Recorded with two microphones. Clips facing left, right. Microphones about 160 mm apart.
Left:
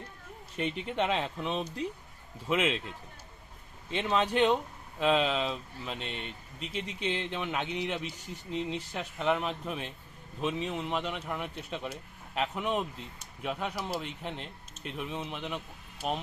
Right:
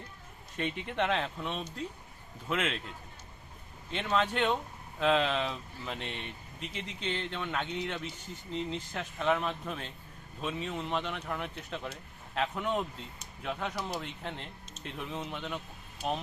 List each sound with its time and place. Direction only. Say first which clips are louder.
0.5 s speech: left 2 dB; 15° left (ahead or behind)
3.9 s speech: left 3 dB; 15° left (ahead or behind)
7.0 s a man's voice: left 2 dB; 15° left (ahead or behind)